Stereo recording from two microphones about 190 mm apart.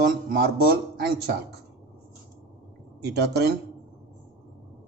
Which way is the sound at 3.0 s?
60° right (ahead or behind).